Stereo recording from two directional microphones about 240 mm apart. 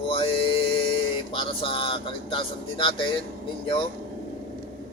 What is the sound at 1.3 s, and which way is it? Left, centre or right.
Speech, left.